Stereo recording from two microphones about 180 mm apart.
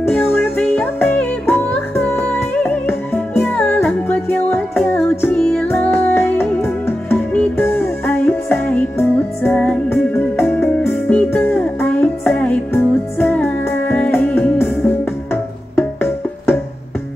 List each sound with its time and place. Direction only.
0.1 s music: 10° left (ahead or behind)